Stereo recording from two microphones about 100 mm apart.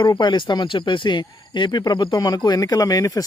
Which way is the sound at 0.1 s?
50° left (ahead or behind).